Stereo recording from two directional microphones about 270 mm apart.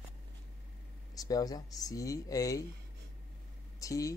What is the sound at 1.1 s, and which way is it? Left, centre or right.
Speech, centre.